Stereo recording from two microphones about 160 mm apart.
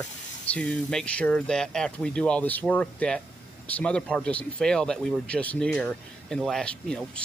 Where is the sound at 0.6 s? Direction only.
5° left (ahead or behind).